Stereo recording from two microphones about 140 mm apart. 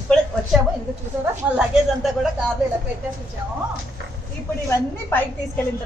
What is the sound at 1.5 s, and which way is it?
Speech, centre (ahead or behind).